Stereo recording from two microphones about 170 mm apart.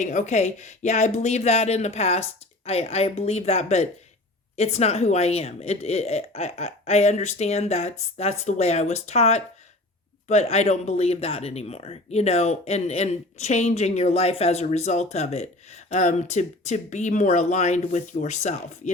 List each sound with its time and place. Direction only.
0.0 s speech: 45° left (ahead or behind)